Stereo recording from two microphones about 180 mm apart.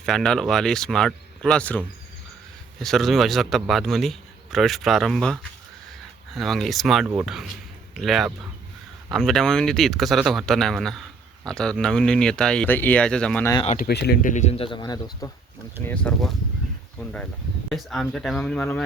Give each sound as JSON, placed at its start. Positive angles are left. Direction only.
{"t": 0.0, "sound": "a man's voice", "side_deg": 0}
{"t": 13.7, "sound": "speech", "side_deg": 55}
{"t": 15.8, "sound": "a man's voice", "side_deg": 10}